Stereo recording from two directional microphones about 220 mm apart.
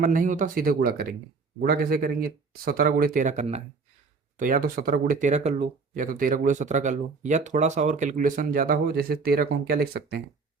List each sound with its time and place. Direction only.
0.0 s speech: 40° right (ahead or behind)